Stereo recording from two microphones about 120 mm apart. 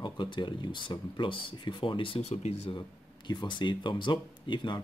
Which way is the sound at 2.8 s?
40° left (ahead or behind).